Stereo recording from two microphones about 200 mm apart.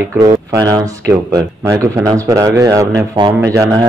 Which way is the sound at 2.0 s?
15° right (ahead or behind).